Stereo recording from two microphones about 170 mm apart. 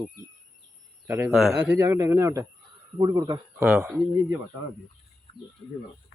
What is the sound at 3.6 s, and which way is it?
Speech, 5° right (ahead or behind).